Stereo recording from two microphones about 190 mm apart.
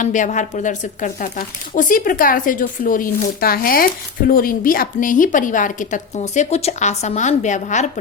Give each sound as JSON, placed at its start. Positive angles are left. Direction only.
{"t": 0.0, "sound": "speech", "side_deg": 40}